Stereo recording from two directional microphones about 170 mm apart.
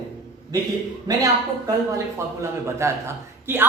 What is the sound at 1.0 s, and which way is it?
A woman's voice, 20° right (ahead or behind).